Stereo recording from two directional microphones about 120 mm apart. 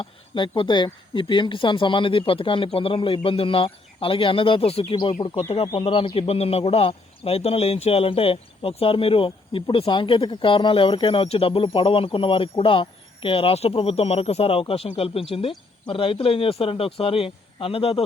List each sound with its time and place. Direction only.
0.0 s a man's voice: 45° left (ahead or behind)